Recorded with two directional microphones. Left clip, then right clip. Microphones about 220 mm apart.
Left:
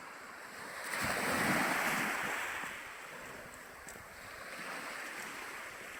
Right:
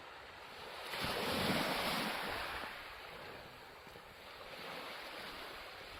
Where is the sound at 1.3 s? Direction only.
40° right (ahead or behind).